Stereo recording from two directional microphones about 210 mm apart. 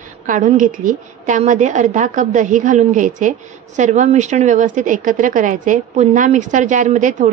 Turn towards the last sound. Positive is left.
turn(degrees=-35)  # may be behind; listen again after turning